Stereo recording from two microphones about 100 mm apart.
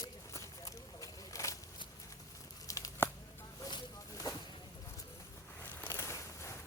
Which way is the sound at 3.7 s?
45° left (ahead or behind).